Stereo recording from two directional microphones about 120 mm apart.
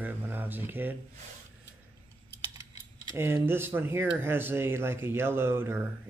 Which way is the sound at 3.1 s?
20° right (ahead or behind).